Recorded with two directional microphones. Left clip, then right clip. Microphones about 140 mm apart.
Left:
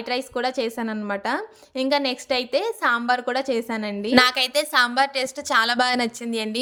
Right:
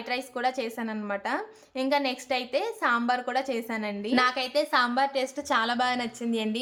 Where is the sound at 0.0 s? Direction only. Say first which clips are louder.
Left 4 dB; 30° left (ahead or behind).